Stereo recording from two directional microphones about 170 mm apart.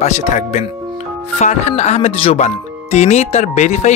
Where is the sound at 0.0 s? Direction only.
45° left (ahead or behind).